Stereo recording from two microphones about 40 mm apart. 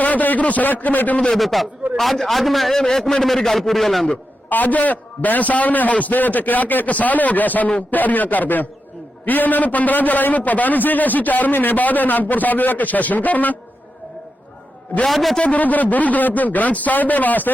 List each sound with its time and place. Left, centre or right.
0.0 s a man's voice: left
1.4 s a man's voice: centre
4.4 s a man's voice: left
15.0 s a man's voice: centre
15.4 s a man's voice: left